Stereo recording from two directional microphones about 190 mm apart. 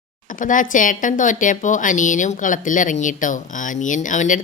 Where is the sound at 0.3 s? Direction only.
45° left (ahead or behind).